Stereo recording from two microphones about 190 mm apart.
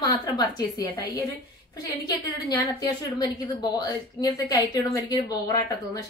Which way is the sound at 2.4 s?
15° left (ahead or behind).